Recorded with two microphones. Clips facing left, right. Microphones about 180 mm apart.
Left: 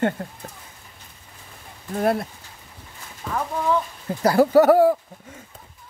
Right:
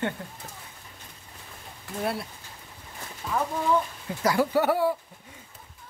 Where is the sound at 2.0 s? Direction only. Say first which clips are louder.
Left 8 dB; 50° left (ahead or behind).